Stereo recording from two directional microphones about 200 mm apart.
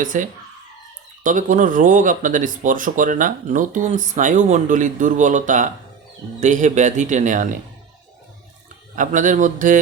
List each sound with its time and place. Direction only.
0.0 s speech: 40° right (ahead or behind)
9.0 s speech: 40° right (ahead or behind)